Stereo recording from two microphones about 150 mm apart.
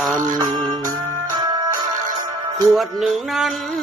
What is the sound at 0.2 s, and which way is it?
Music, 25° right (ahead or behind).